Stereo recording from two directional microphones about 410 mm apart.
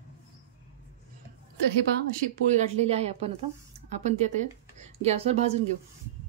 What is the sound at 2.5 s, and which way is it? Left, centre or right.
Speech, centre.